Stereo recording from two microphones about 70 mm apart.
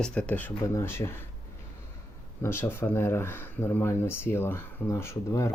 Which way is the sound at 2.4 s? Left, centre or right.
Left.